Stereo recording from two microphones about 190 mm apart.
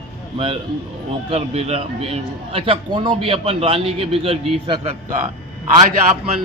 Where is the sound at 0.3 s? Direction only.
25° right (ahead or behind).